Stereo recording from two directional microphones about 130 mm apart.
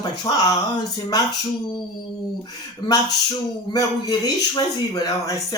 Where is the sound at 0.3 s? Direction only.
30° left (ahead or behind).